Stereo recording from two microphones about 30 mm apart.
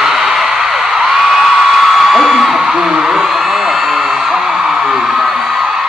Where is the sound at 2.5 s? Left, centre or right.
Centre.